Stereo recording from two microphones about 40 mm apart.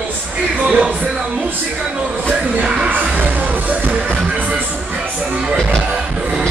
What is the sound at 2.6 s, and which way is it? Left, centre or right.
Music, right.